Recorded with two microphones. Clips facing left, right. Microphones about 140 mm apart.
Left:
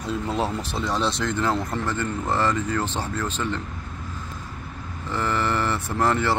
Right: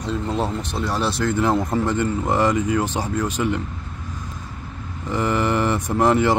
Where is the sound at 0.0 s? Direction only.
5° left (ahead or behind).